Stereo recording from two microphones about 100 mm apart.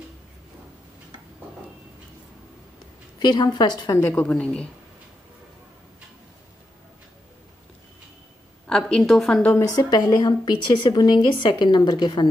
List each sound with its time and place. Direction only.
3.2 s a woman's voice: 45° left (ahead or behind)
3.9 s a woman's voice: 25° left (ahead or behind)
4.2 s a woman's voice: 10° left (ahead or behind)
8.6 s a woman's voice: 5° left (ahead or behind)
9.4 s a woman's voice: 15° left (ahead or behind)
9.8 s a woman's voice: 40° left (ahead or behind)